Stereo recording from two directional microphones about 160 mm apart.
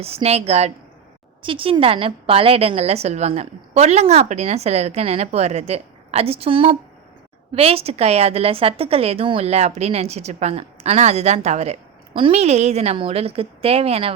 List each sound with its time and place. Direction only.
0.0 s a woman's voice: 40° right (ahead or behind)